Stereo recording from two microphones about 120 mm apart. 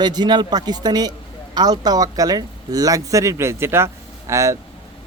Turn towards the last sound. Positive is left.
turn(degrees=-25)  # may be behind; listen again after turning